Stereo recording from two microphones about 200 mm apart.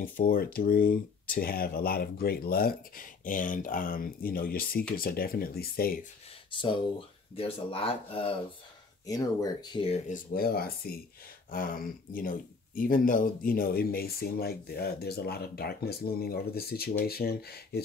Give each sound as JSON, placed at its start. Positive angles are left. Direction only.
{"t": 0.0, "sound": "speech", "side_deg": 45}
{"t": 6.5, "sound": "speech", "side_deg": 25}
{"t": 10.0, "sound": "speech", "side_deg": 45}